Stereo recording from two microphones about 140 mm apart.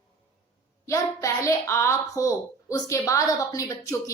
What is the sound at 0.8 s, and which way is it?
A child's voice, 20° left (ahead or behind).